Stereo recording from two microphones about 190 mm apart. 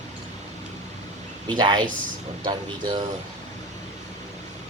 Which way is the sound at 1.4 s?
20° right (ahead or behind).